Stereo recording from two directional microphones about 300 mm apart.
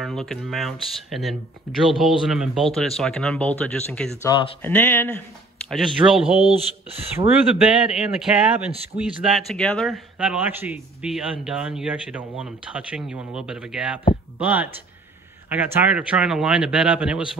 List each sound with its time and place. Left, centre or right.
0.0 s a man's voice: centre
6.4 s speech: centre
7.9 s a man's voice: centre